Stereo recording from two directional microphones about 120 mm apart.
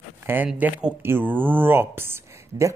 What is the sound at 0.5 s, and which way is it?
Speech, 15° right (ahead or behind).